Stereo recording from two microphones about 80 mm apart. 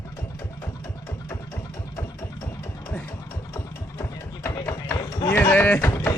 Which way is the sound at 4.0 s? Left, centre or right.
Left.